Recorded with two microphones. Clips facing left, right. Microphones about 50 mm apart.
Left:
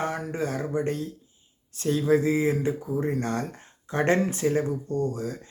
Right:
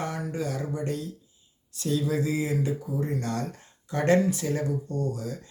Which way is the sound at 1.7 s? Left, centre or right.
Left.